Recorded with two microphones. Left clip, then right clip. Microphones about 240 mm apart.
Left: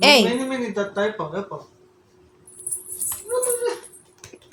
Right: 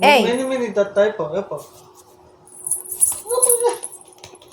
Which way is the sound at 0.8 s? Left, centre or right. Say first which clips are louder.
Right 8 dB; centre.